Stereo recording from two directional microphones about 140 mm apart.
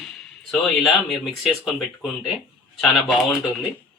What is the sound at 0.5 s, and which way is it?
Speech, 5° left (ahead or behind).